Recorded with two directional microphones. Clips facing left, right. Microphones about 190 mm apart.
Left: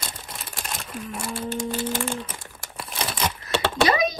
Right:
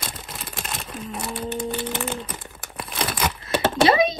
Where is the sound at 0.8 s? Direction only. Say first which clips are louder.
Even; 25° right (ahead or behind).